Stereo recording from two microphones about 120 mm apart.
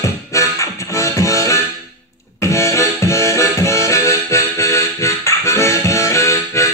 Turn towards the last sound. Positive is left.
turn(degrees=25)  # may be behind; listen again after turning